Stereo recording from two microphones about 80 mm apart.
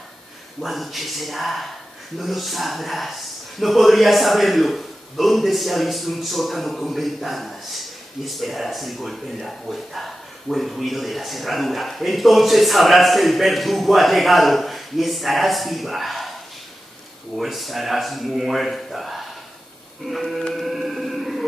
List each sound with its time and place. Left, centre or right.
0.6 s speech: centre
17.4 s speech: centre
20.1 s music: centre